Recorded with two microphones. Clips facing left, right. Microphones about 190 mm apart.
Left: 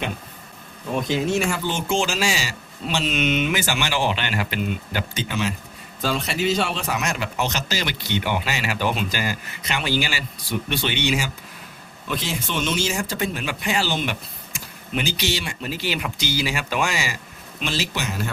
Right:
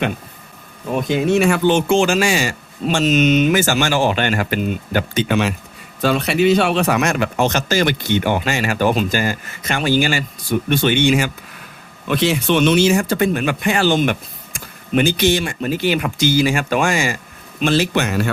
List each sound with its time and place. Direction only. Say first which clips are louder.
1.0 s speech: right 8 dB; 60° right (ahead or behind)
12.0 s speech: right 11 dB; 70° right (ahead or behind)